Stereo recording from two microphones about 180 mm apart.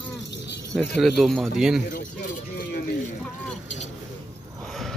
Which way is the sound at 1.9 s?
50° left (ahead or behind).